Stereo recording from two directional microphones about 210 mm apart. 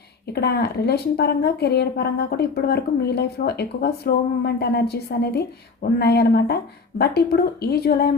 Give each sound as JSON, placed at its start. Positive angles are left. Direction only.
{"t": 0.3, "sound": "speech", "side_deg": 50}